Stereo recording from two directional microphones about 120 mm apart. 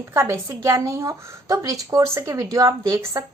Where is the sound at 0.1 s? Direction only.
20° right (ahead or behind).